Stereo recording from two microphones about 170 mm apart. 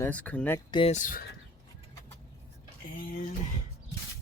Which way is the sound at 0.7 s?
30° left (ahead or behind).